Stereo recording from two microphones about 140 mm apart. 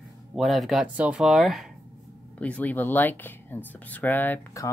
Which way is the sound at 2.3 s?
10° left (ahead or behind).